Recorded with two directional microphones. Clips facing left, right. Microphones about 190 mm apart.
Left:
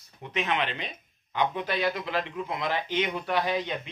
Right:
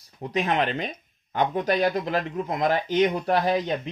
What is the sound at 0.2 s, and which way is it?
Speech, 40° right (ahead or behind).